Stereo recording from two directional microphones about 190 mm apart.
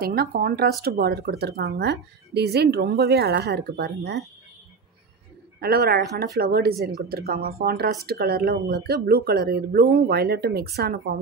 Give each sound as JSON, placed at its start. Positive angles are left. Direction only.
{"t": 0.0, "sound": "speech", "side_deg": -55}
{"t": 5.6, "sound": "speech", "side_deg": -55}
{"t": 6.8, "sound": "speech", "side_deg": 0}
{"t": 7.1, "sound": "speech", "side_deg": -55}